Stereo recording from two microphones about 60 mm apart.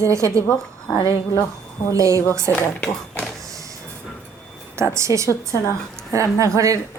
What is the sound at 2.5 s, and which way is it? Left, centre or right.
Speech, left.